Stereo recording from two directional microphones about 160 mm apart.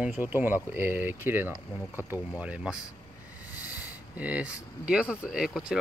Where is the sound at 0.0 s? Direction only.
10° right (ahead or behind).